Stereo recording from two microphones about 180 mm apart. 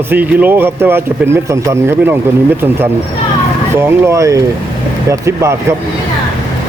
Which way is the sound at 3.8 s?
15° right (ahead or behind).